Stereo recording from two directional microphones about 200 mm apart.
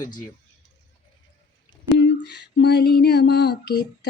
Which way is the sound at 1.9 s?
60° left (ahead or behind).